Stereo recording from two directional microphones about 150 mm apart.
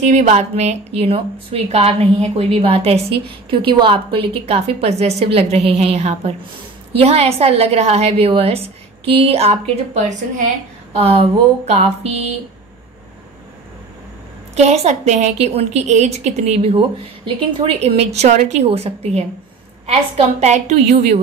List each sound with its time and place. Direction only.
0.0 s a woman's voice: 50° right (ahead or behind)
14.5 s a woman's voice: 45° right (ahead or behind)